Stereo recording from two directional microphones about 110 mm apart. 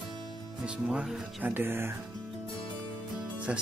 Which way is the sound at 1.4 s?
20° right (ahead or behind).